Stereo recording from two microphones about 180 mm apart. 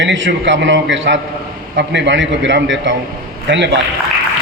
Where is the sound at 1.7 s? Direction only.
75° right (ahead or behind).